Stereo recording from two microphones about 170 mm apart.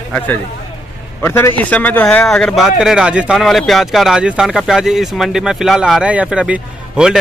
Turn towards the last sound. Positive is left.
turn(degrees=-5)  # may be behind; listen again after turning